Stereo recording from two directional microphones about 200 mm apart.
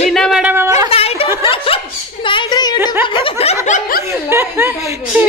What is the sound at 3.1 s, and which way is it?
Snicker, 25° left (ahead or behind).